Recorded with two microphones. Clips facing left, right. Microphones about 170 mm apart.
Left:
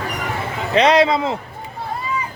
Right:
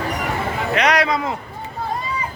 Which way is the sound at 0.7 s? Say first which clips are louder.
Left 5 dB; 25° left (ahead or behind).